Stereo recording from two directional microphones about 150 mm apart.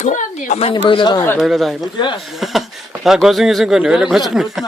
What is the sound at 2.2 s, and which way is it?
Speech, centre (ahead or behind).